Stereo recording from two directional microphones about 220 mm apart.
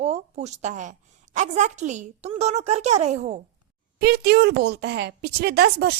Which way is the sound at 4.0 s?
45° right (ahead or behind).